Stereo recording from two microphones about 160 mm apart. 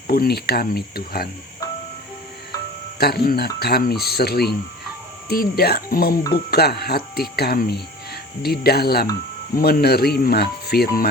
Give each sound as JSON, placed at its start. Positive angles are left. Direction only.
{"t": 0.1, "sound": "speech", "side_deg": 75}
{"t": 3.0, "sound": "speech", "side_deg": 80}
{"t": 6.3, "sound": "speech", "side_deg": 80}